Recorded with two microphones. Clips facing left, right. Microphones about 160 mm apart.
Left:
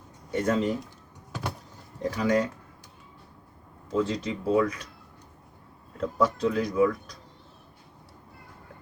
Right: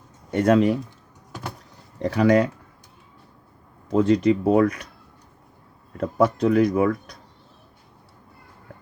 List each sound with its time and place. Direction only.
0.3 s speech: 70° right (ahead or behind)
2.0 s speech: 65° right (ahead or behind)
3.8 s speech: 60° right (ahead or behind)
6.0 s speech: 60° right (ahead or behind)